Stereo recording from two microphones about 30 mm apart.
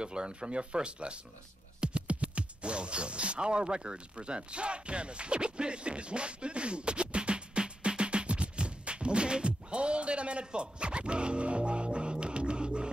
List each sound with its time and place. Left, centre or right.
0.0 s speech: right
1.8 s music: right
2.2 s zipper: right